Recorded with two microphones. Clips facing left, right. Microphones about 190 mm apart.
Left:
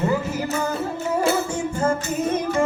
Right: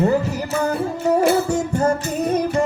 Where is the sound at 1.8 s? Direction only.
35° right (ahead or behind).